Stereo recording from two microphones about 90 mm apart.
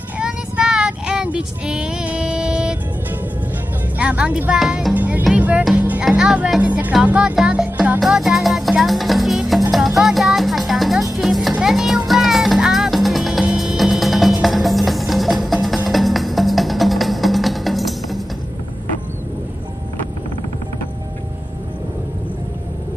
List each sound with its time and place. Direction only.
0.2 s child singing: 10° right (ahead or behind)
4.0 s speech: 10° right (ahead or behind)
4.6 s music: 5° right (ahead or behind)
4.9 s music: 20° right (ahead or behind)
6.0 s speech: 5° right (ahead or behind)
8.0 s music: centre (ahead or behind)